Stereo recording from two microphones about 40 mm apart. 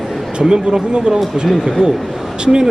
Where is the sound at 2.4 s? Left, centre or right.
Right.